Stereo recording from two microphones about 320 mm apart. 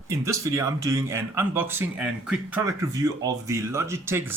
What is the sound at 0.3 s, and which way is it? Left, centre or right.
Speech, centre.